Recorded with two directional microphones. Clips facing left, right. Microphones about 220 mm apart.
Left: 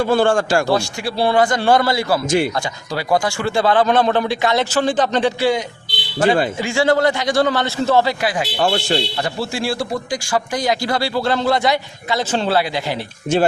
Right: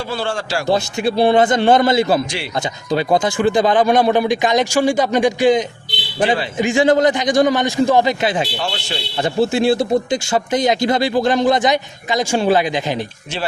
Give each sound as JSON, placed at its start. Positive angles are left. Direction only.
{"t": 0.0, "sound": "a man's voice", "side_deg": 50}
{"t": 0.7, "sound": "a man's voice", "side_deg": -20}
{"t": 8.6, "sound": "a man's voice", "side_deg": 50}
{"t": 9.2, "sound": "a man's voice", "side_deg": -20}